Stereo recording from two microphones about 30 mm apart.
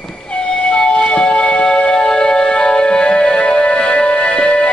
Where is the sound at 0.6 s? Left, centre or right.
Left.